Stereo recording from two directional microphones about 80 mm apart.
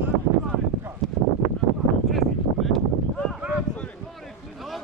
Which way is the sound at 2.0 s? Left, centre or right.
Centre.